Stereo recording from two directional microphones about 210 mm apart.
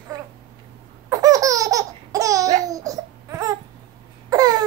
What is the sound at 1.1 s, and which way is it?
Laughter, 15° right (ahead or behind).